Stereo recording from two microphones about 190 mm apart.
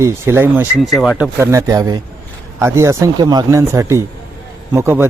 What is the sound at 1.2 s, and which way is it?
A man's voice, 15° right (ahead or behind).